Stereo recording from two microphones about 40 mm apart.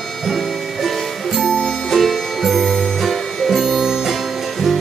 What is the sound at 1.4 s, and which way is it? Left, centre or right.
Music, left.